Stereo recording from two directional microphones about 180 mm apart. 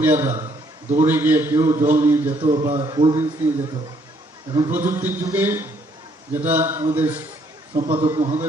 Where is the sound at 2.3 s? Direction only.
30° right (ahead or behind).